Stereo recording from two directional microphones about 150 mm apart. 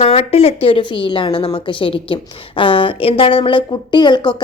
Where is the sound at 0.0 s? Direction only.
40° left (ahead or behind).